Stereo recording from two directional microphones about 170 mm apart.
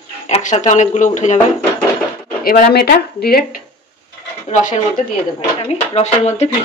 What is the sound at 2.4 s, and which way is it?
Speech, 50° left (ahead or behind).